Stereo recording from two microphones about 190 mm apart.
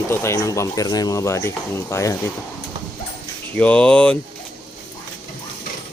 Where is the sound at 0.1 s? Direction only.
15° left (ahead or behind).